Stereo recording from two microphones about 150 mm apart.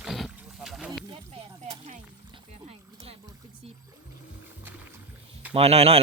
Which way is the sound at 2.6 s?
40° right (ahead or behind).